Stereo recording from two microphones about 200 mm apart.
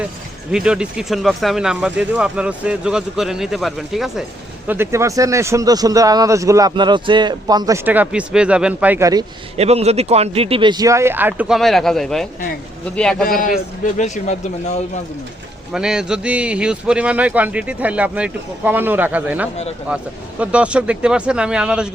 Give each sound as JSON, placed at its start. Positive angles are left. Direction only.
{"t": 0.5, "sound": "speech", "side_deg": -5}
{"t": 7.9, "sound": "speech", "side_deg": -5}
{"t": 9.6, "sound": "speech", "side_deg": -30}
{"t": 13.2, "sound": "a man's voice", "side_deg": 45}
{"t": 14.0, "sound": "a man's voice", "side_deg": 35}
{"t": 15.7, "sound": "speech", "side_deg": -5}